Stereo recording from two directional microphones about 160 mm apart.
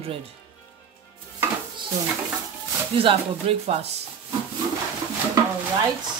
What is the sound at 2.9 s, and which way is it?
Speech, 35° right (ahead or behind).